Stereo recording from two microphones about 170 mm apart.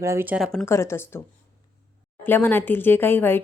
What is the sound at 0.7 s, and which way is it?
Speech, 15° left (ahead or behind).